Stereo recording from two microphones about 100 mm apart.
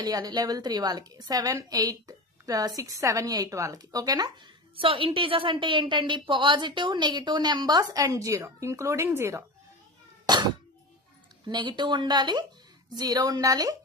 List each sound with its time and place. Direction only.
0.0 s a woman's voice: 40° right (ahead or behind)
4.8 s a woman's voice: 65° right (ahead or behind); by 9.4 s 25° right (ahead or behind)
10.3 s cat: 45° right (ahead or behind)
11.4 s a woman's voice: 50° right (ahead or behind)